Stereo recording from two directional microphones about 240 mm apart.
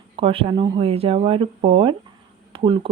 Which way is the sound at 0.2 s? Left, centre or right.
Right.